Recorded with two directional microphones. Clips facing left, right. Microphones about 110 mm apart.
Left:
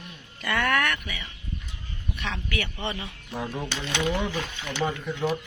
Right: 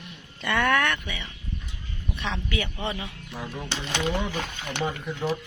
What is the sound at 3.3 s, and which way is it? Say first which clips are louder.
Speech: left 4 dB; 10° left (ahead or behind).